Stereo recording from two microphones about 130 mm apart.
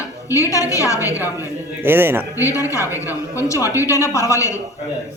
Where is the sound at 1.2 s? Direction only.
15° right (ahead or behind).